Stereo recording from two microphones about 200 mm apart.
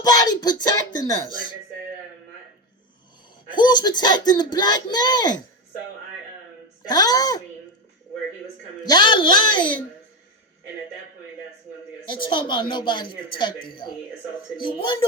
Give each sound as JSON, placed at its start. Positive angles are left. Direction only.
{"t": 0.0, "sound": "a woman's voice", "side_deg": 20}
{"t": 3.5, "sound": "a woman's voice", "side_deg": 20}
{"t": 6.8, "sound": "a woman's voice", "side_deg": 20}
{"t": 8.8, "sound": "a woman's voice", "side_deg": 20}
{"t": 12.0, "sound": "a woman's voice", "side_deg": 25}